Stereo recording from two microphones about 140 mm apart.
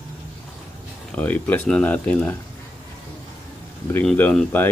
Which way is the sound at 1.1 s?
10° left (ahead or behind).